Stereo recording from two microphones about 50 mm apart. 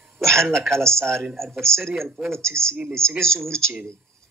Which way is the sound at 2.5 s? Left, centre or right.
Right.